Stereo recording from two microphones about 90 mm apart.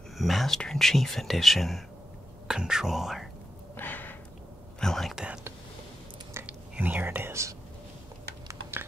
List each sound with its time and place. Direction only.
0.2 s speech: centre (ahead or behind)
3.7 s a sound: 20° left (ahead or behind)
4.7 s whispering: 5° left (ahead or behind)
6.4 s speech: 20° right (ahead or behind)